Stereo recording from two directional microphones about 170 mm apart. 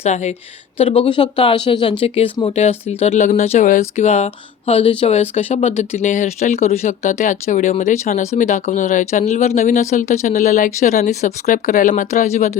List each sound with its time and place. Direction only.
0.0 s speech: 40° left (ahead or behind)